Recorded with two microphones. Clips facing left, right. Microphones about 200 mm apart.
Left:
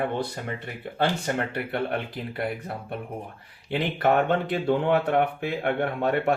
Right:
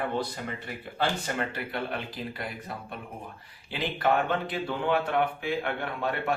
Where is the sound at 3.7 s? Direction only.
60° left (ahead or behind).